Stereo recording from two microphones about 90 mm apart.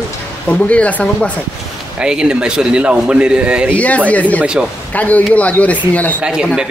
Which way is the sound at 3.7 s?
15° left (ahead or behind).